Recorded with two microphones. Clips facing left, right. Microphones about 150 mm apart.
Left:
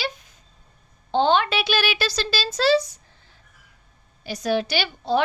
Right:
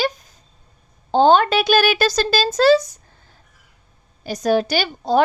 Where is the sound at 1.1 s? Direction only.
40° right (ahead or behind).